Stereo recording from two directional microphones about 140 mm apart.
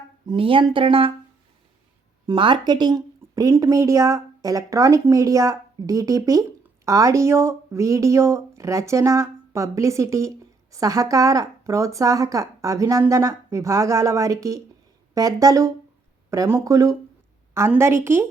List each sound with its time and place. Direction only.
0.3 s speech: 40° right (ahead or behind)
2.2 s speech: 35° right (ahead or behind); by 18.3 s 20° right (ahead or behind)